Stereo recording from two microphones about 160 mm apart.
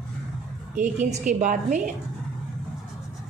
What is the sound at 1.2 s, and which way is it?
Speech, 55° right (ahead or behind).